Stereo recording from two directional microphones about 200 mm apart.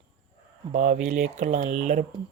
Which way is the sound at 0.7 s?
35° right (ahead or behind).